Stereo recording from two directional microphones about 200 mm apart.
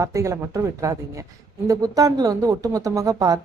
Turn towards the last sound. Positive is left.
turn(degrees=-15)  # may be behind; listen again after turning